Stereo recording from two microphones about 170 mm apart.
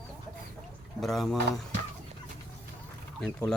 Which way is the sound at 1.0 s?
Centre (ahead or behind).